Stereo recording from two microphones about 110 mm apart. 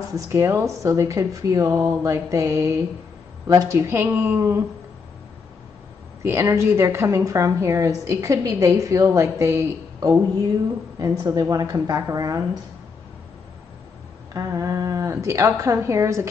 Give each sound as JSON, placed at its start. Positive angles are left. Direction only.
{"t": 0.1, "sound": "speech", "side_deg": -25}
{"t": 6.2, "sound": "a woman's voice", "side_deg": -25}
{"t": 14.3, "sound": "speech", "side_deg": -30}